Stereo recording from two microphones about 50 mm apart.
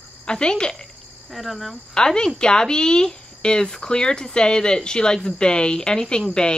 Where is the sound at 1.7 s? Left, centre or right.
Centre.